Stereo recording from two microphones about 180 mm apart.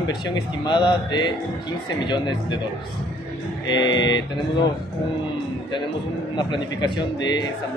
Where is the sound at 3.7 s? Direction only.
25° left (ahead or behind).